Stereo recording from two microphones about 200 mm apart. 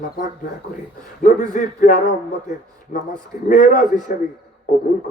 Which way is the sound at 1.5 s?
40° left (ahead or behind).